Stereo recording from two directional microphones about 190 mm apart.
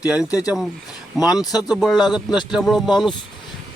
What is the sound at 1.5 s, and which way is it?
Speech, centre (ahead or behind).